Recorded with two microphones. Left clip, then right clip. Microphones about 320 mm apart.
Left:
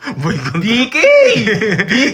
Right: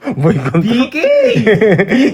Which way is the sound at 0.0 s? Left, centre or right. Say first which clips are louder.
Right 5 dB; centre.